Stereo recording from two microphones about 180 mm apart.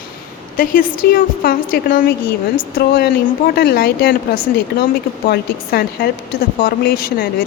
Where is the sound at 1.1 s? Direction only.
55° left (ahead or behind).